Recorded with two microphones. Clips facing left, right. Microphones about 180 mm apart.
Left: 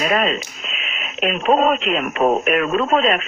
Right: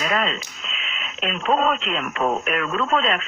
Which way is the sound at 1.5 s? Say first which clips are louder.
Left 4 dB; 30° left (ahead or behind).